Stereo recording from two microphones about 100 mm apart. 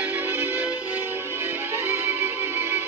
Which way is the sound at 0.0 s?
20° right (ahead or behind).